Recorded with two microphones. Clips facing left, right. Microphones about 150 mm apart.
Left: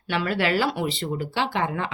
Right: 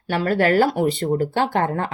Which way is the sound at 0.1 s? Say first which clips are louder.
Right 5 dB; 45° right (ahead or behind).